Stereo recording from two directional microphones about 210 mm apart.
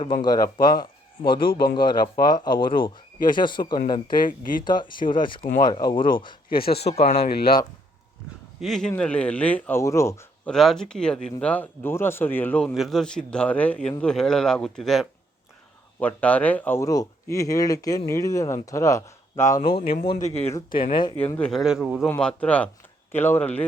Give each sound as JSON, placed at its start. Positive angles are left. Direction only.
{"t": 0.2, "sound": "speech", "side_deg": 20}
{"t": 4.1, "sound": "speech", "side_deg": 40}
{"t": 4.6, "sound": "speech", "side_deg": 20}
{"t": 6.5, "sound": "speech", "side_deg": 45}
{"t": 8.6, "sound": "a man's voice", "side_deg": 0}
{"t": 10.5, "sound": "a man's voice", "side_deg": 0}
{"t": 19.7, "sound": "speech", "side_deg": 25}
{"t": 20.0, "sound": "speech", "side_deg": 40}
{"t": 20.9, "sound": "speech", "side_deg": 20}
{"t": 21.3, "sound": "a man's voice", "side_deg": 5}